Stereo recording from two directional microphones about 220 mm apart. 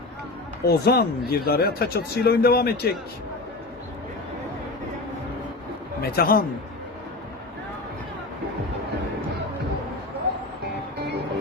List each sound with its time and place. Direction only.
0.6 s speech: 45° left (ahead or behind)
6.0 s speech: 45° left (ahead or behind)